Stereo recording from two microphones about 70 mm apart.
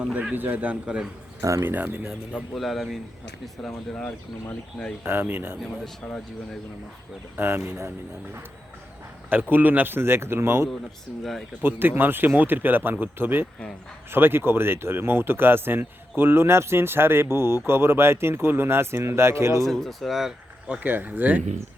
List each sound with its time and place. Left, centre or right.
0.0 s speech: centre
0.3 s speech: right
1.4 s speech: right
1.6 s speech: right
2.6 s speech: centre
3.9 s speech: centre
5.0 s speech: right
6.1 s speech: centre
7.3 s speech: right
9.3 s speech: right
11.2 s speech: centre
11.6 s speech: right
19.6 s speech: centre
20.7 s speech: right